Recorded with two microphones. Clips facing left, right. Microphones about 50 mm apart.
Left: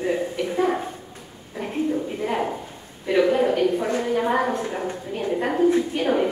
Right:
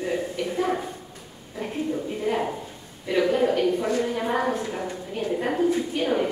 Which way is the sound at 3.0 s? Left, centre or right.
Centre.